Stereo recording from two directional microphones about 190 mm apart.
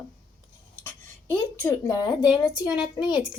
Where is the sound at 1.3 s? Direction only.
15° left (ahead or behind).